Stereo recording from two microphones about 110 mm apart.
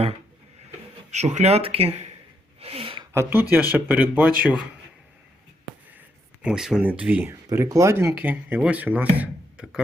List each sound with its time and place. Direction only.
1.1 s speech: 90° right; by 2.0 s 65° right (ahead or behind)
2.6 s a sound: 65° right (ahead or behind)
3.1 s speech: 20° right (ahead or behind)
6.4 s speech: 5° right (ahead or behind)
7.3 s speech: 25° right (ahead or behind); by 9.8 s 10° right (ahead or behind)